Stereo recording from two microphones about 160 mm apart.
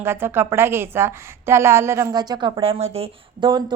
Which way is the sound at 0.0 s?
15° right (ahead or behind).